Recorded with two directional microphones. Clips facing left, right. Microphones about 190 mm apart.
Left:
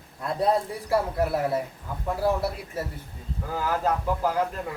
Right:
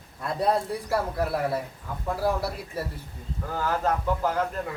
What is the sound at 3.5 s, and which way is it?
Speech, 10° left (ahead or behind).